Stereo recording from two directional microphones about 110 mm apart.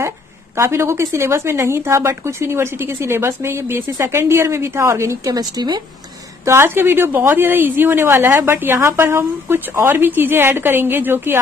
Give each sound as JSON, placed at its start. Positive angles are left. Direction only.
{"t": 0.6, "sound": "speech", "side_deg": -25}
{"t": 6.4, "sound": "speech", "side_deg": -25}